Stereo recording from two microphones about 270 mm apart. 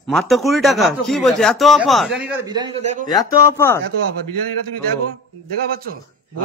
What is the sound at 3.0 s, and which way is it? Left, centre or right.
Speech, centre.